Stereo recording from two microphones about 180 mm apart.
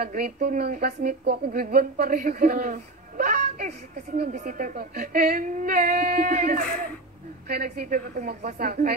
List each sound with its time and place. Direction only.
0.0 s speech: 55° right (ahead or behind)
4.3 s speech: 45° right (ahead or behind)
7.4 s speech: 60° right (ahead or behind)